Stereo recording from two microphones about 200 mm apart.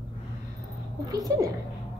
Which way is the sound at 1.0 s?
15° right (ahead or behind).